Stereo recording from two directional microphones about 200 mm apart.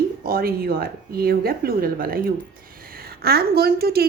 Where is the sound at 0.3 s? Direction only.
50° right (ahead or behind).